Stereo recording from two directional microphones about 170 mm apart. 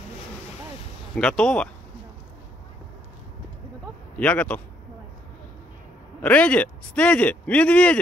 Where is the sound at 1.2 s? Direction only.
5° left (ahead or behind).